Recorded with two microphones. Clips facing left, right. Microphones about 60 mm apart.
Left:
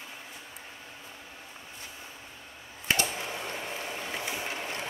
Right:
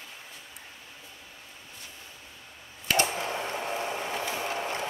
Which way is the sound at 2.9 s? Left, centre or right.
Right.